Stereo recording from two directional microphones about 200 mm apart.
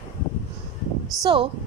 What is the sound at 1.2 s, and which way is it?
Speech, 25° right (ahead or behind).